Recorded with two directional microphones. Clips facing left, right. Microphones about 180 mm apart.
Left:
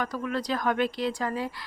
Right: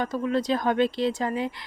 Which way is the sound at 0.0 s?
25° right (ahead or behind).